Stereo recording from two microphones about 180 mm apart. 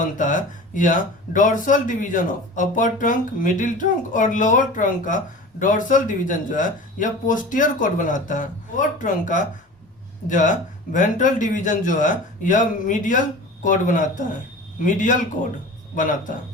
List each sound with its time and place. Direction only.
0.0 s speech: 45° left (ahead or behind)